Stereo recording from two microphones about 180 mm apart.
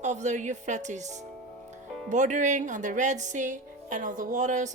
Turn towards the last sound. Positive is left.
turn(degrees=-45)  # may be behind; listen again after turning